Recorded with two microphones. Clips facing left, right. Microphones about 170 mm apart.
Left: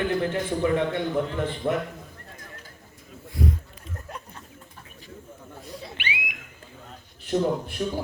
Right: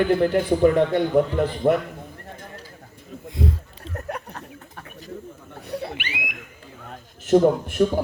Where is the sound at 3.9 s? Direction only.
70° right (ahead or behind).